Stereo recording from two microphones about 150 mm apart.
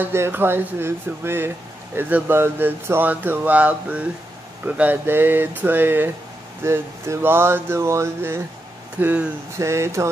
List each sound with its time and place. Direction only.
0.0 s speech: 15° right (ahead or behind)